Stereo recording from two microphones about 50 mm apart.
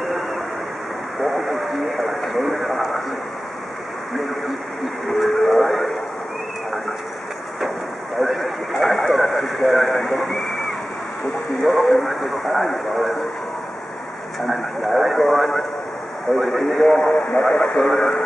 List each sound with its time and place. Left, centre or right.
1.2 s vehicle: centre
5.1 s radio: centre
8.2 s a sound: centre
9.7 s vehicle: centre
11.6 s radio: centre
14.4 s a sound: centre
16.3 s radio: centre
17.1 s vehicle: left
17.5 s radio: centre